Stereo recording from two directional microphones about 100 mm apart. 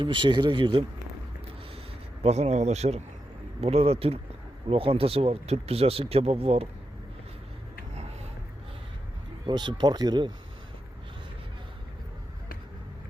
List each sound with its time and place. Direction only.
0.0 s speech: 55° right (ahead or behind)
2.2 s speech: 90° right
4.7 s speech: 70° right (ahead or behind)
9.5 s speech: 50° right (ahead or behind)